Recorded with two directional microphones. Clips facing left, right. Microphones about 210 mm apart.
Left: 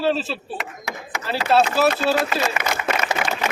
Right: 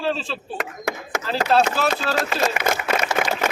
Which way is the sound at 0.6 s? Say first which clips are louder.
Right 4 dB; 50° right (ahead or behind).